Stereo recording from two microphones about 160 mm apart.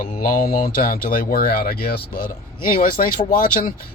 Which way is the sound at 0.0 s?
60° left (ahead or behind).